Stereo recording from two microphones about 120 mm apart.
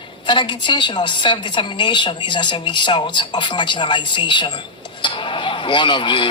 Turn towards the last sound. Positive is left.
turn(degrees=40)  # may be behind; listen again after turning